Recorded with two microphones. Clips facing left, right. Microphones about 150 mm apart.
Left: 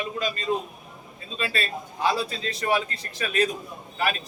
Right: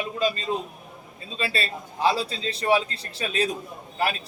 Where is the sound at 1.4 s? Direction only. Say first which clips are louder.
Even; 30° right (ahead or behind).